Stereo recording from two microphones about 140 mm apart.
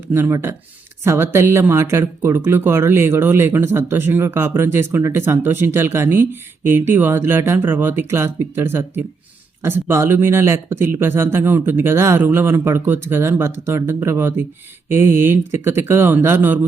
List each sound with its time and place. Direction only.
0.1 s speech: 20° right (ahead or behind)